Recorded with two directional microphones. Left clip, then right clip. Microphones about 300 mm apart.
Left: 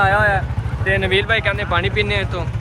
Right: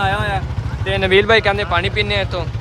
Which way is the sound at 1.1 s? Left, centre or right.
Right.